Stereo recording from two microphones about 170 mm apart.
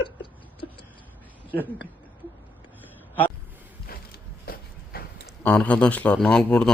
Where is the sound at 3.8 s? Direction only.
60° left (ahead or behind).